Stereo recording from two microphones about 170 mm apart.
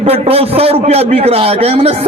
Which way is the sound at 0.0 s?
35° right (ahead or behind).